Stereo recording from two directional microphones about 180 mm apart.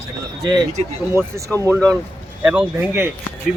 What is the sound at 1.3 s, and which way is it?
Speech, 15° right (ahead or behind).